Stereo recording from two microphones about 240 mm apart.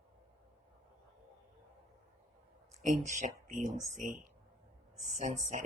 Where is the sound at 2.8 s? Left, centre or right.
Right.